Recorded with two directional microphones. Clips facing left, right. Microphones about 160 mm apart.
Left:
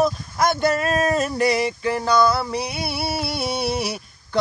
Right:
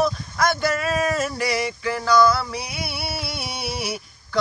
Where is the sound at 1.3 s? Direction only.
25° left (ahead or behind).